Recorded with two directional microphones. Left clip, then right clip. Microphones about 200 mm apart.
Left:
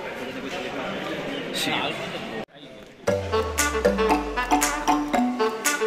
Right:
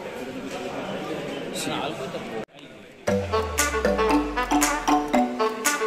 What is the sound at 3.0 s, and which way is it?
Music, centre (ahead or behind).